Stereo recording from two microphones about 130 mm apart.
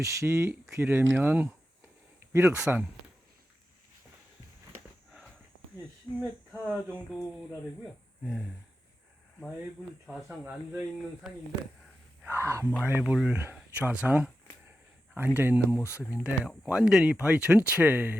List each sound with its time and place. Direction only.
0.0 s speech: 25° right (ahead or behind); by 2.8 s 10° right (ahead or behind)
6.1 s speech: 30° left (ahead or behind)
6.7 s speech: 10° right (ahead or behind)
8.2 s a sound: 5° right (ahead or behind)
10.1 s a sound: 5° right (ahead or behind)
10.4 s speech: 15° right (ahead or behind)
15.8 s speech: 20° left (ahead or behind)
16.1 s speech: 10° right (ahead or behind)